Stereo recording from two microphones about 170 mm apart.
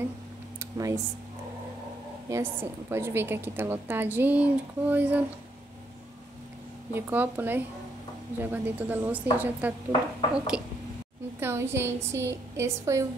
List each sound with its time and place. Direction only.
0.6 s computer keyboard: 20° right (ahead or behind)
2.2 s a woman's voice: 15° right (ahead or behind)
6.9 s a woman's voice: 10° right (ahead or behind)